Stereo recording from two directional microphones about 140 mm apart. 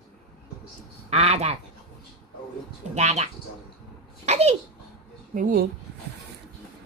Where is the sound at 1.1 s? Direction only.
50° right (ahead or behind).